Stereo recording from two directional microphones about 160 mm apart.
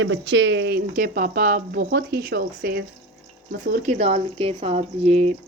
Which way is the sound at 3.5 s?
55° right (ahead or behind).